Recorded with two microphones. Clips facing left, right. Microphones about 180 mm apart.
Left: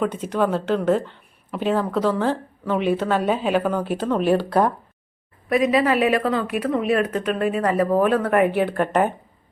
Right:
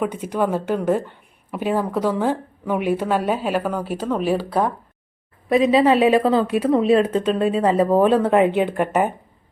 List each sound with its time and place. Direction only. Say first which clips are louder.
0.0 s a woman's voice: even; 10° right (ahead or behind)
5.5 s a woman's voice: right 3 dB; 30° right (ahead or behind); by 9.1 s 10° right (ahead or behind)